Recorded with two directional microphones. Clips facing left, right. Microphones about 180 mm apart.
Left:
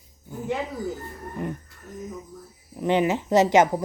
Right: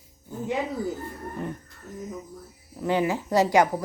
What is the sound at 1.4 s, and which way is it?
Music, 15° left (ahead or behind).